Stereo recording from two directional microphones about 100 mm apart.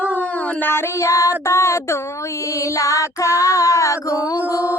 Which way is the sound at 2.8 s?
35° left (ahead or behind).